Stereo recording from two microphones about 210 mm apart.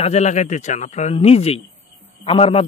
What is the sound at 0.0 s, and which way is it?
A man's voice, 30° left (ahead or behind).